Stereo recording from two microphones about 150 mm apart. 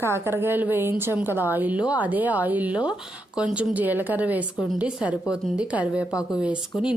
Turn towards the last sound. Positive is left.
turn(degrees=0)  # may be behind; listen again after turning